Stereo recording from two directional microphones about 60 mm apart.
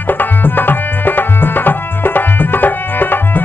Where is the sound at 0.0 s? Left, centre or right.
Left.